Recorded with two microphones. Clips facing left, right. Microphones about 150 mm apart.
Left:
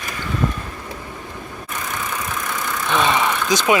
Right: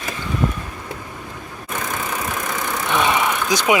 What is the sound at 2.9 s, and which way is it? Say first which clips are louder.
Vehicle: left 1 dB; 10° right (ahead or behind).